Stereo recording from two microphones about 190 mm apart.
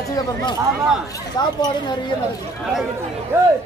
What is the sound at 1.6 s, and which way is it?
Speech, 25° left (ahead or behind).